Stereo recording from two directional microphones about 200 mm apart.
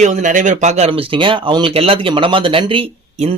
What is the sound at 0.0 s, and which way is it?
Speech, 40° right (ahead or behind).